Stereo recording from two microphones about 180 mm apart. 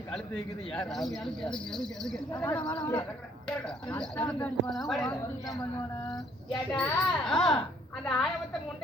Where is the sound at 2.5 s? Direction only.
25° left (ahead or behind).